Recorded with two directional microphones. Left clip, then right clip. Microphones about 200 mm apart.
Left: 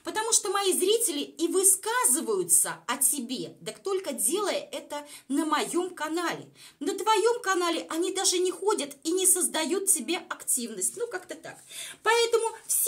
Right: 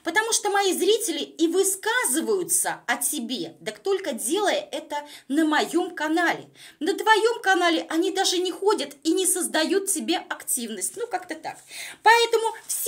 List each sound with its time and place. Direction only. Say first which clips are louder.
0.1 s a woman's voice: right 5 dB; 15° right (ahead or behind)